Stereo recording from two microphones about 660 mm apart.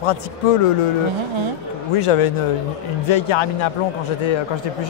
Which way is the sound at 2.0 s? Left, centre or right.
Left.